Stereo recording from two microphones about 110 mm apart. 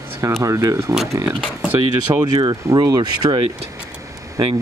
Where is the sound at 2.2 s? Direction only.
40° right (ahead or behind).